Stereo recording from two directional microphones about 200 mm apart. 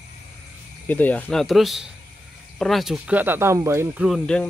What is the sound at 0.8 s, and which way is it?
Speech, 10° left (ahead or behind).